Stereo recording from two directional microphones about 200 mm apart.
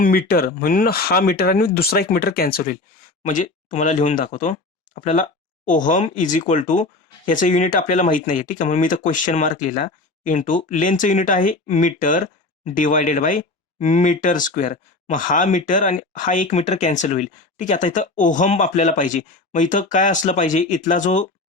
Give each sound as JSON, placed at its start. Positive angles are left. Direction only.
{"t": 0.0, "sound": "speech", "side_deg": 50}